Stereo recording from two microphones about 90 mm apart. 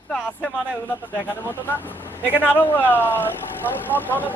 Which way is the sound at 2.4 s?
20° left (ahead or behind).